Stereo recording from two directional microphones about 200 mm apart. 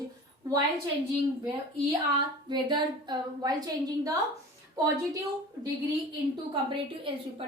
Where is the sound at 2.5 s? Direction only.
20° right (ahead or behind).